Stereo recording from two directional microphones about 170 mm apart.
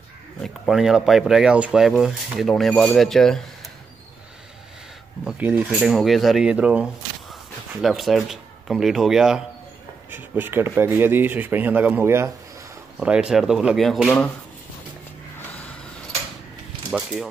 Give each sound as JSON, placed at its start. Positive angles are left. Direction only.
{"t": 0.4, "sound": "speech", "side_deg": 0}
{"t": 5.2, "sound": "speech", "side_deg": -5}
{"t": 15.5, "sound": "vehicle", "side_deg": 5}
{"t": 16.9, "sound": "speech", "side_deg": 0}